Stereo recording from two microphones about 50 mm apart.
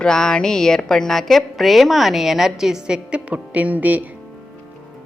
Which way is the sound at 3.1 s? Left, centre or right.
Right.